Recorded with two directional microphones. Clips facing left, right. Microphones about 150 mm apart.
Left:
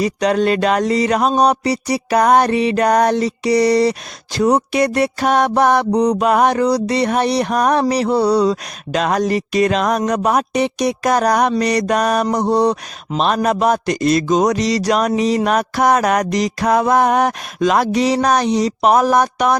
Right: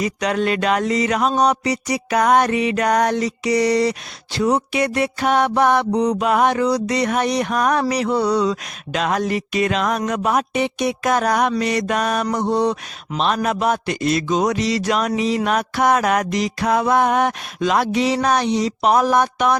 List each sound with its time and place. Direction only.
0.0 s music: 35° left (ahead or behind)